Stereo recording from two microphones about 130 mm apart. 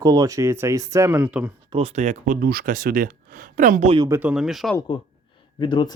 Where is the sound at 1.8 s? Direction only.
60° right (ahead or behind); by 3.9 s 90° right.